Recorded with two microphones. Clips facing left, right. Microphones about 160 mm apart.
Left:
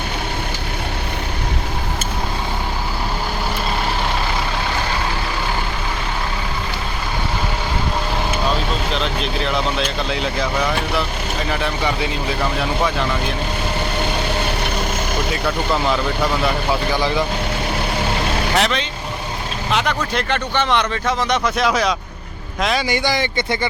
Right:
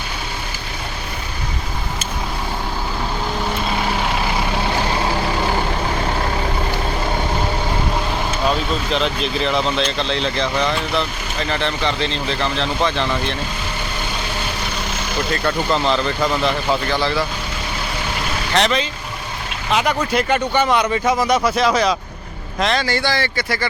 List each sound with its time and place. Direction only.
8.9 s speech: centre (ahead or behind)
15.3 s speech: 5° left (ahead or behind)
18.5 s speech: centre (ahead or behind); by 23.6 s 20° left (ahead or behind)